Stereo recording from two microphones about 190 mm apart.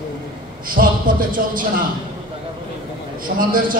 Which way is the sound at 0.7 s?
45° right (ahead or behind).